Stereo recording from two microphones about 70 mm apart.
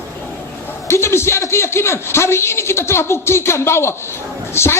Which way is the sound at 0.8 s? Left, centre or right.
Left.